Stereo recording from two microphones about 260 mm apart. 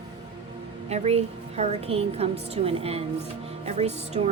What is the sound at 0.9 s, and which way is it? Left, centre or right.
A woman's voice, right.